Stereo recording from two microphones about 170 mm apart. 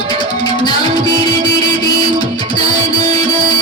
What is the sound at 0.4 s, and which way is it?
Music, 25° left (ahead or behind).